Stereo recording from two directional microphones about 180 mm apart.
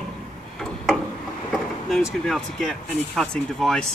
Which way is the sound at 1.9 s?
Centre (ahead or behind).